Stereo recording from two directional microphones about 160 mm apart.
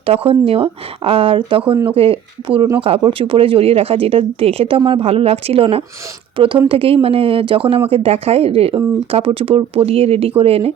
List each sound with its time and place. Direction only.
0.0 s speech: 35° right (ahead or behind)